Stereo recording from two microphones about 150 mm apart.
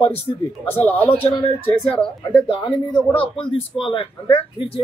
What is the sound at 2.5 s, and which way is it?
Speech, 30° left (ahead or behind).